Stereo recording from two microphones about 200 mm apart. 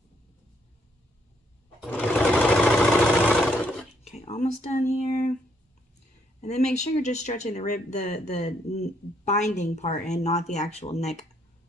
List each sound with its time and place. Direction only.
1.8 s sewing machine: 5° left (ahead or behind)
4.1 s speech: 35° left (ahead or behind)
6.7 s speech: 35° left (ahead or behind)